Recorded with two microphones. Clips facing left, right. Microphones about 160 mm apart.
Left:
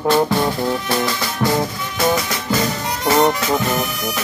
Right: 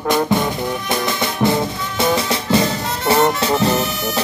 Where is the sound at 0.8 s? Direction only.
20° right (ahead or behind).